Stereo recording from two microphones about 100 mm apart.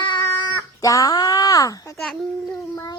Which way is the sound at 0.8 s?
35° left (ahead or behind).